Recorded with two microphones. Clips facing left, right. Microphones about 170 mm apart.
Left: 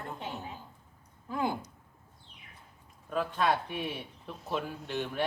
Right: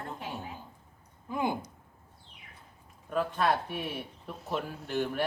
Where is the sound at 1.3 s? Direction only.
15° right (ahead or behind).